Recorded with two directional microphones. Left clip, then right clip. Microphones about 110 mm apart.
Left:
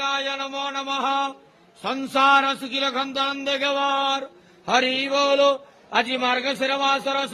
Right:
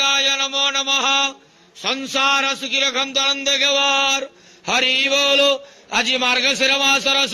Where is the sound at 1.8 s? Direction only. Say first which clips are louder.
Right 1 dB; 10° left (ahead or behind).